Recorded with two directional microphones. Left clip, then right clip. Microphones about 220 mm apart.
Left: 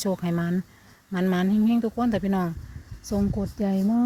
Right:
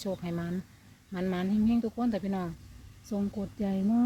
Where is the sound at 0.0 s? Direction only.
40° left (ahead or behind).